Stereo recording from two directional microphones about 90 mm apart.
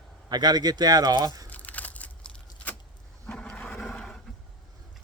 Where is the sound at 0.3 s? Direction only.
50° right (ahead or behind).